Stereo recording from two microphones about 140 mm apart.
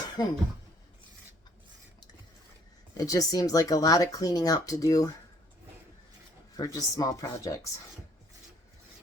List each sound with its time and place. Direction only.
0.2 s speech: 30° left (ahead or behind)
3.0 s speech: 25° left (ahead or behind)
6.6 s speech: 25° left (ahead or behind)